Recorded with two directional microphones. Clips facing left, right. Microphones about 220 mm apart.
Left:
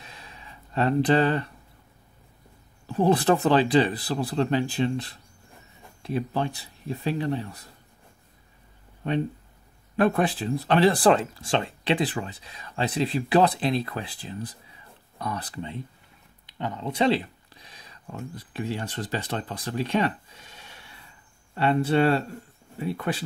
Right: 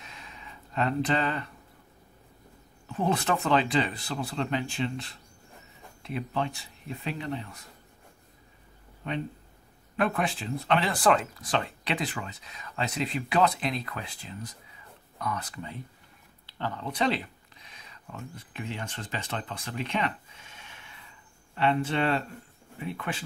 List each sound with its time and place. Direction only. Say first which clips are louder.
0.0 s a sound: left 1 dB; 35° left (ahead or behind)
2.9 s speech: left 7 dB; 35° left (ahead or behind)
9.9 s speech: left 6 dB; 35° left (ahead or behind)
16.4 s speech: left 3 dB; 15° left (ahead or behind); by 23.2 s 35° left (ahead or behind)